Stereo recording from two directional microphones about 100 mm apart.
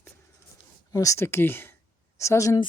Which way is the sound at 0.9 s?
30° left (ahead or behind).